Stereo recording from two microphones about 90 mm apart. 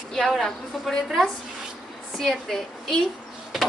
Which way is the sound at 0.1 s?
5° left (ahead or behind).